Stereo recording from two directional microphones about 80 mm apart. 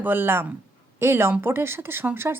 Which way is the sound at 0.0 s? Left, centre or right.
Right.